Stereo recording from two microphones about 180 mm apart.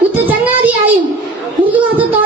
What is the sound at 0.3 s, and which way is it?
Child singing, 10° right (ahead or behind).